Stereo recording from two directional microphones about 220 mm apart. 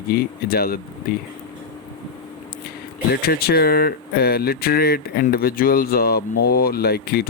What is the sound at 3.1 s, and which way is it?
Speech, 45° left (ahead or behind).